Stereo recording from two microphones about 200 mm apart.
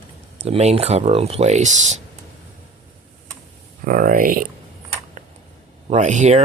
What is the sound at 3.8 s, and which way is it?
Speech, 45° right (ahead or behind).